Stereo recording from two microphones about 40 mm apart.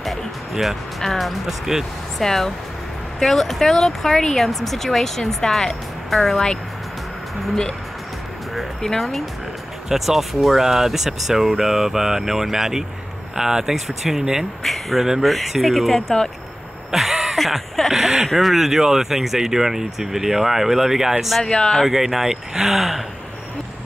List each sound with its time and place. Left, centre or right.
0.0 s music: centre
1.1 s speech: centre
2.1 s speech: centre
8.8 s speech: centre
9.8 s speech: centre
16.9 s a sound: centre
17.9 s speech: centre
21.5 s speech: centre
21.8 s speech: centre